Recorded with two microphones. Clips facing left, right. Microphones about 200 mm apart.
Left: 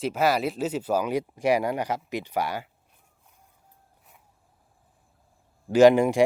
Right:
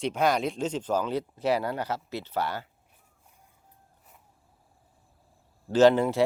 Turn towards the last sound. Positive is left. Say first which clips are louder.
# left 3 dB
turn(degrees=15)  # may be behind; listen again after turning